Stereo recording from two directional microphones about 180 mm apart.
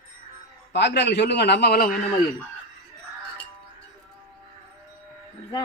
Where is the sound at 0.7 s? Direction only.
70° left (ahead or behind).